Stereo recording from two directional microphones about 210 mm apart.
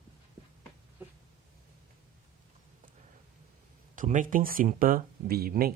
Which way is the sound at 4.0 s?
40° right (ahead or behind).